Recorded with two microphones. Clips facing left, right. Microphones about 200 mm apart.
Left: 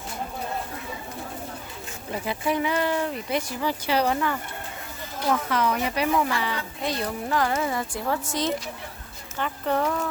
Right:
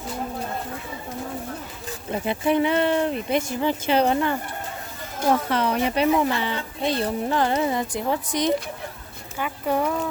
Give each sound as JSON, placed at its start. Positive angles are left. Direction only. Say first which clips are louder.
{"t": 2.2, "sound": "speech", "louder": "right 5 dB", "side_deg": -25}